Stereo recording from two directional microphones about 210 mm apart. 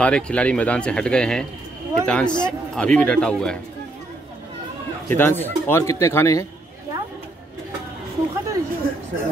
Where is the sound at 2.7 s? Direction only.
5° left (ahead or behind).